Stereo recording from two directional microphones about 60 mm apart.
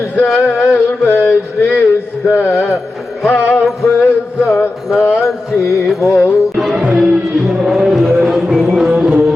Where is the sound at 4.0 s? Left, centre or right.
Left.